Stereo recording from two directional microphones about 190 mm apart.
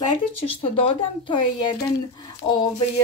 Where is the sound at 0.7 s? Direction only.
25° left (ahead or behind).